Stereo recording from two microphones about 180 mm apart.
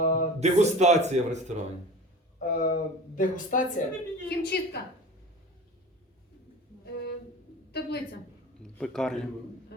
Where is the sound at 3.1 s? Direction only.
45° left (ahead or behind).